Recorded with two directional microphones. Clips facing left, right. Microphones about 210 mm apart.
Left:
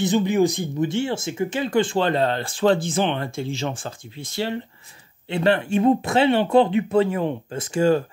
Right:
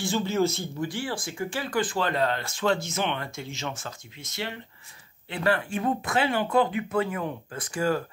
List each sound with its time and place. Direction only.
0.0 s speech: 15° left (ahead or behind)